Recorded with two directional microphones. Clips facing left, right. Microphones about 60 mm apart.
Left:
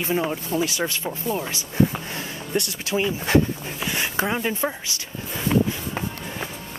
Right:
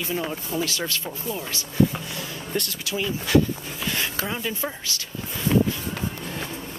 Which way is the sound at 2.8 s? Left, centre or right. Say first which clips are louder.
Left 4 dB; left.